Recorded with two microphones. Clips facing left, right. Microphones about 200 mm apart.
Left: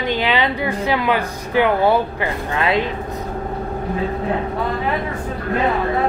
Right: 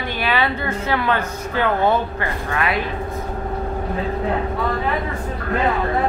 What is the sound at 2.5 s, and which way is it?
Speech, 25° left (ahead or behind).